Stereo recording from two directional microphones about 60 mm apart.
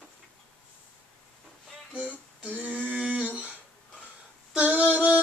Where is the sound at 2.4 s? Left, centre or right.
Right.